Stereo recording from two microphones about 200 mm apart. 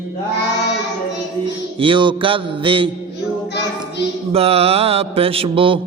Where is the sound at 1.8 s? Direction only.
25° right (ahead or behind).